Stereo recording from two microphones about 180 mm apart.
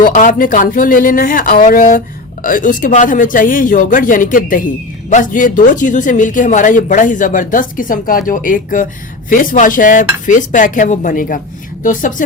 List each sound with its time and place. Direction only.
0.0 s speech: 50° left (ahead or behind)